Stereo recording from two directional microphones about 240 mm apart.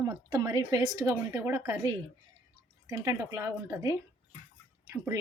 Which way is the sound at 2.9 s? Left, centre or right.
Centre.